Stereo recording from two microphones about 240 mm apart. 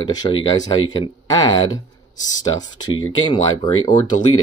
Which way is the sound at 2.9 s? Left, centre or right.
Left.